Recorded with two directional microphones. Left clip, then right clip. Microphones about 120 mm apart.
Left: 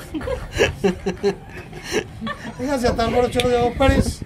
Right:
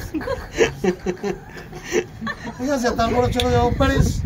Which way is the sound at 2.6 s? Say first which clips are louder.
Even; 25° left (ahead or behind).